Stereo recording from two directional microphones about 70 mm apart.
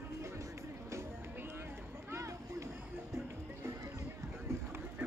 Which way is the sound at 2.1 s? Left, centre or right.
Right.